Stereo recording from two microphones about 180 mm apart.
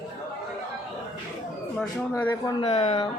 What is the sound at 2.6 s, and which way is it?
Speech, 35° left (ahead or behind).